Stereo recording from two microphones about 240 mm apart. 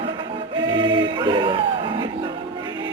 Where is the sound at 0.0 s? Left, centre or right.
Right.